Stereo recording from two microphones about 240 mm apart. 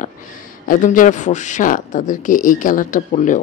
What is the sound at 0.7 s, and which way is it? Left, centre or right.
Speech, left.